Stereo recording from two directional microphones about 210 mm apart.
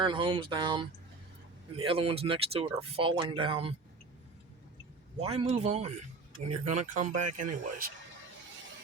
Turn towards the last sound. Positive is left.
turn(degrees=-40)  # may be behind; listen again after turning